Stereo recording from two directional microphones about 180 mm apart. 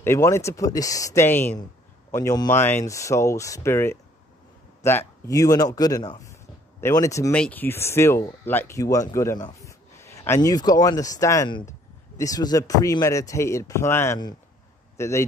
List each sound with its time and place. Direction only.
0.0 s a man's voice: 15° left (ahead or behind)